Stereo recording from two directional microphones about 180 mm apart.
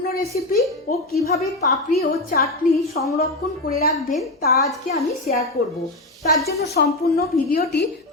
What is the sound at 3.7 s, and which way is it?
Speech, 55° left (ahead or behind).